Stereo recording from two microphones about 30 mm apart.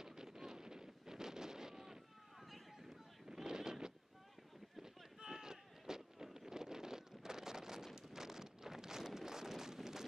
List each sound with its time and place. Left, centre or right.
0.0 s wind noise: centre
3.3 s a sound: right
5.2 s sheep: centre